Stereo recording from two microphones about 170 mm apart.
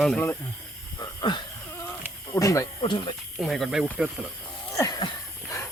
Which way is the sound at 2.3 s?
20° left (ahead or behind).